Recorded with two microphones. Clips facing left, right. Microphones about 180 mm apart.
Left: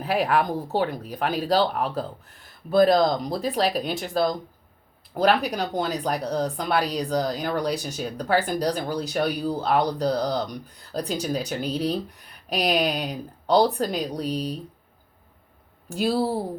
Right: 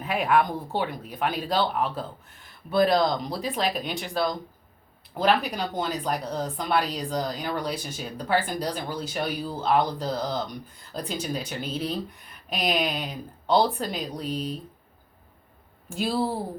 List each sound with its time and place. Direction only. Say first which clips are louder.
0.0 s speech: left 1 dB; 35° left (ahead or behind)
15.9 s speech: left 3 dB; 40° left (ahead or behind)